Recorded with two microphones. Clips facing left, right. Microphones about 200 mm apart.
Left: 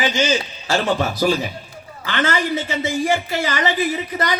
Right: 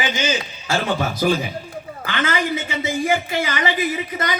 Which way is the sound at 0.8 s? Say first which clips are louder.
Left 1 dB; 45° left (ahead or behind).